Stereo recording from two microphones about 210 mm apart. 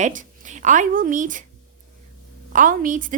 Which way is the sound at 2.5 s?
40° right (ahead or behind).